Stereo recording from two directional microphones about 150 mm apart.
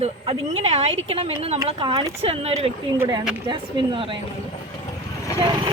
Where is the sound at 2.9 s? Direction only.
25° right (ahead or behind).